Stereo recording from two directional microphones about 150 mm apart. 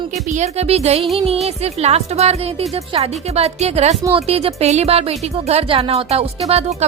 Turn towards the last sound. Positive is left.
turn(degrees=-45)  # may be behind; listen again after turning